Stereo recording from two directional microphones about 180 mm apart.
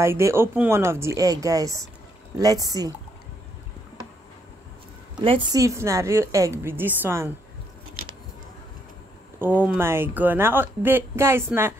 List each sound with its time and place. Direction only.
0.0 s speech: 15° right (ahead or behind)
5.1 s speech: 25° right (ahead or behind)
5.6 s speech: 15° right (ahead or behind)
9.4 s speech: 10° right (ahead or behind)